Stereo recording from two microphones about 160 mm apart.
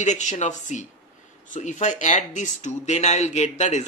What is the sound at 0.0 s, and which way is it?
Speech, 50° left (ahead or behind).